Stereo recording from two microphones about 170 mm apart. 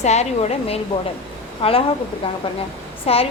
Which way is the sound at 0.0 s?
40° left (ahead or behind).